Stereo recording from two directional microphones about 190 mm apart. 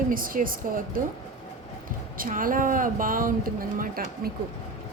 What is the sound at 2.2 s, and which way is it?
Speech, 45° right (ahead or behind).